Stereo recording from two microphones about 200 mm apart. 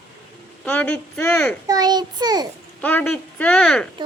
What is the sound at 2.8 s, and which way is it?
Speech, 10° left (ahead or behind).